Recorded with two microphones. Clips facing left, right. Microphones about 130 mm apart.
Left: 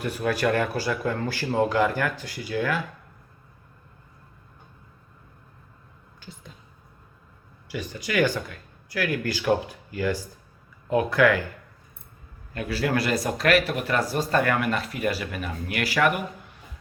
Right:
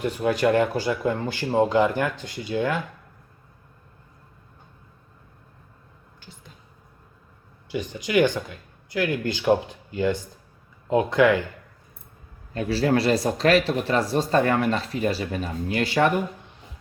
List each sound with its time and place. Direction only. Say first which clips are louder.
0.0 s speech: right 3 dB; 20° right (ahead or behind)
7.7 s speech: right 5 dB; 20° right (ahead or behind)
12.5 s speech: right 4 dB; 30° right (ahead or behind)